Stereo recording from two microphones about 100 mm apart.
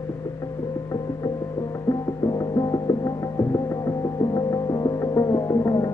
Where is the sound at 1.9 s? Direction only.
40° left (ahead or behind).